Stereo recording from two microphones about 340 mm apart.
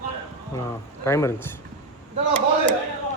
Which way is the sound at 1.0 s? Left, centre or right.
Centre.